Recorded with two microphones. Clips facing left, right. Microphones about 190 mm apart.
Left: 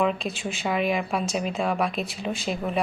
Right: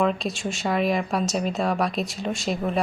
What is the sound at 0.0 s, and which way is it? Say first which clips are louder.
Speech: right 1 dB; centre (ahead or behind).